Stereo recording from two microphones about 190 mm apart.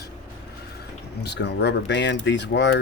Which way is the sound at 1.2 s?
65° left (ahead or behind).